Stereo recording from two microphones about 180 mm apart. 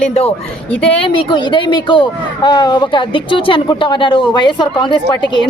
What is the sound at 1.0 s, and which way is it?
Speech, 25° left (ahead or behind).